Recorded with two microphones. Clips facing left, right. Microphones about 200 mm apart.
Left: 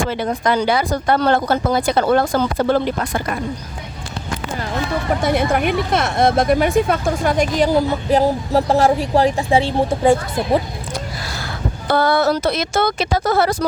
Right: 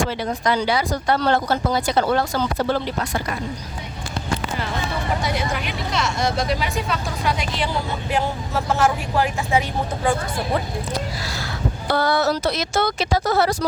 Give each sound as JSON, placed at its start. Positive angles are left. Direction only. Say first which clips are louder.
{"t": 0.0, "sound": "speech", "louder": "left 3 dB", "side_deg": 55}
{"t": 5.2, "sound": "speech", "louder": "left 8 dB", "side_deg": 55}
{"t": 11.9, "sound": "speech", "louder": "left 4 dB", "side_deg": 55}